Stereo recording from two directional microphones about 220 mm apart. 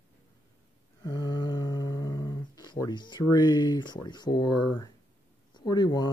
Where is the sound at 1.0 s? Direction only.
20° left (ahead or behind).